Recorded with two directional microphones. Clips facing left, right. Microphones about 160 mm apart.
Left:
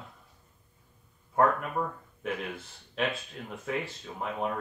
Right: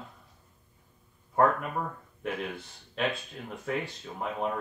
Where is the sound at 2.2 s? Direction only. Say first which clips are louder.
Even; centre (ahead or behind).